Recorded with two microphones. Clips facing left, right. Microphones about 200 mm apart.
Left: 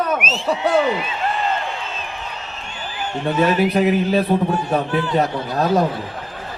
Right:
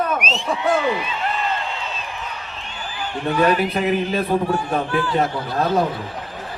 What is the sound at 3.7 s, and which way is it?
Speech, 40° left (ahead or behind).